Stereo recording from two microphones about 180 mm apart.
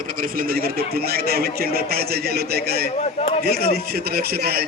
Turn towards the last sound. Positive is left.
turn(degrees=-60)  # may be behind; listen again after turning